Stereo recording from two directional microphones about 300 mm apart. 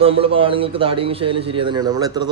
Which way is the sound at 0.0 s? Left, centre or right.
Centre.